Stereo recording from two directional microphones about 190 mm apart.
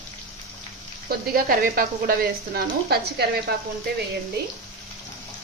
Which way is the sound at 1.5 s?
50° right (ahead or behind).